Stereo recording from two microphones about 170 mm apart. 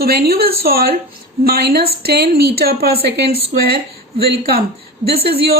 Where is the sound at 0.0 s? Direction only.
65° right (ahead or behind).